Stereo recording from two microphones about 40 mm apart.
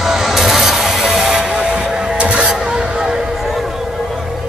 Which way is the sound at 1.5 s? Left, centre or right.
Right.